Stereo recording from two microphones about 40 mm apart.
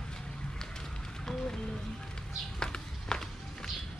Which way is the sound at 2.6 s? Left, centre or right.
Centre.